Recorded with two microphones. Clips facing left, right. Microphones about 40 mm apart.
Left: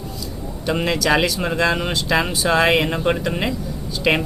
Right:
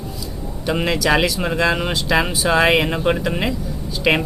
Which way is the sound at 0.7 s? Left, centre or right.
Centre.